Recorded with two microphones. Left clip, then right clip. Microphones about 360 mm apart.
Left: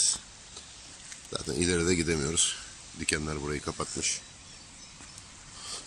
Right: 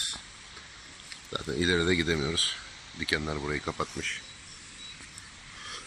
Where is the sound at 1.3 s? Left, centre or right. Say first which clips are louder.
Right 2 dB; centre.